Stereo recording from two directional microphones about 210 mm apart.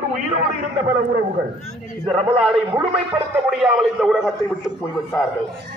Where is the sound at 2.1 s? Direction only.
Centre (ahead or behind).